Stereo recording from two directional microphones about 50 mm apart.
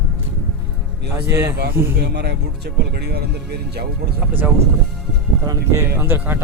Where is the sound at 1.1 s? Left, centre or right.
Right.